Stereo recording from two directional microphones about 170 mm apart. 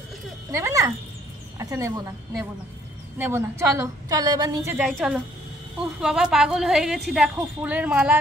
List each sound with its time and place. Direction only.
0.5 s a woman's voice: 15° right (ahead or behind)
4.7 s a woman's voice: 5° right (ahead or behind)